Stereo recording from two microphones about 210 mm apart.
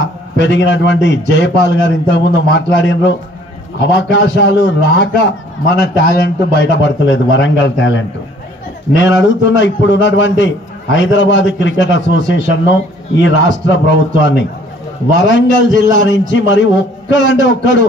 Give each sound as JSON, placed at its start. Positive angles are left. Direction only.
{"t": 0.0, "sound": "a man's voice", "side_deg": 60}